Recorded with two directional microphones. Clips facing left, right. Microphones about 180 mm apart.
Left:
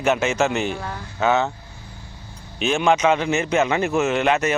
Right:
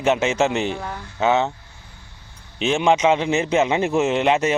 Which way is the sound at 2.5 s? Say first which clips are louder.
Right 1 dB; 25° right (ahead or behind).